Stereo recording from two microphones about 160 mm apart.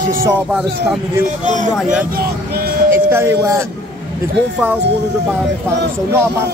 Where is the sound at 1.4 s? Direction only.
50° right (ahead or behind).